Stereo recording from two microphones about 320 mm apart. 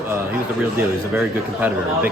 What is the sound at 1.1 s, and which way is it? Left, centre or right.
Speech, centre.